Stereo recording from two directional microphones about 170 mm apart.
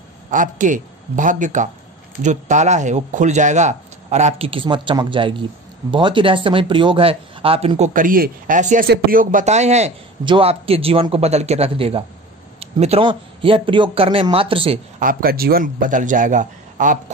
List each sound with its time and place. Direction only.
0.3 s a man's voice: 50° right (ahead or behind)
7.9 s speech: 55° right (ahead or behind)
8.8 s a man's voice: 60° right (ahead or behind); by 14.8 s 30° right (ahead or behind)
15.0 s speech: 55° right (ahead or behind)